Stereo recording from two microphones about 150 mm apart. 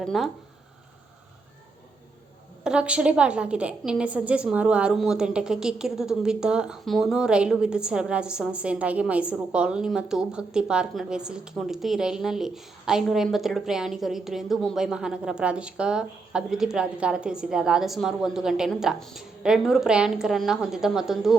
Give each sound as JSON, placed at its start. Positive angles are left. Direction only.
{"t": 0.0, "sound": "a woman's voice", "side_deg": 0}
{"t": 2.6, "sound": "a woman's voice", "side_deg": -5}